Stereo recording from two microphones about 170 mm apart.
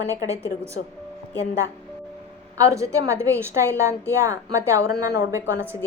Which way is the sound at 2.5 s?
20° right (ahead or behind).